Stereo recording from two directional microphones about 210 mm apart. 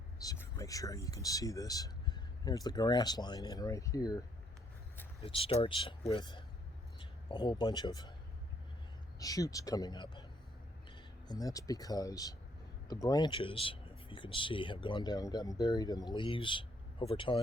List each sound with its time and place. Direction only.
0.2 s speech: 15° left (ahead or behind)
5.2 s a man's voice: 25° left (ahead or behind)
9.1 s speech: 15° left (ahead or behind)